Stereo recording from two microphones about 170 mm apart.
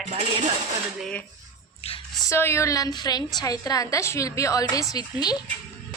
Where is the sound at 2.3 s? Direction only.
15° left (ahead or behind).